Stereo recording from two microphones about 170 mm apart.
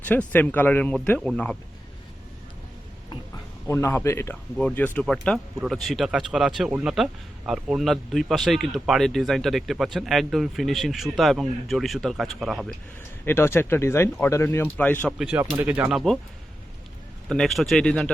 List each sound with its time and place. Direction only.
0.0 s speech: 10° left (ahead or behind)
3.7 s speech: 15° left (ahead or behind); by 12.7 s centre (ahead or behind)
13.2 s speech: 15° left (ahead or behind)
15.2 s speech: 5° right (ahead or behind)
17.2 s speech: 5° left (ahead or behind)